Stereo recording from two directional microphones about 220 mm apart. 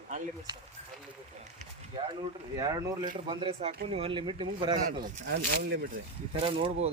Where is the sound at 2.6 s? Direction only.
15° right (ahead or behind).